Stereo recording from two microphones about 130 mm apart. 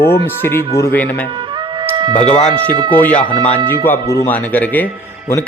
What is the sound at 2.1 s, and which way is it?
Speech, 10° left (ahead or behind).